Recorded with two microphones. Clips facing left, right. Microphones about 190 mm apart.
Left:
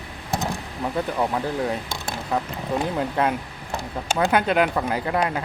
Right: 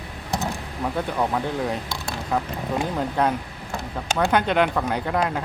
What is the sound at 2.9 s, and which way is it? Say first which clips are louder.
Speech: even; 5° left (ahead or behind).